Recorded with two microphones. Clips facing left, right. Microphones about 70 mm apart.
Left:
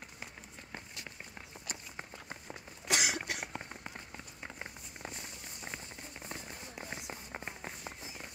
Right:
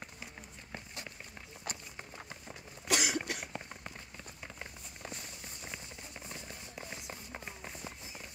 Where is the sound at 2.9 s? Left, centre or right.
Centre.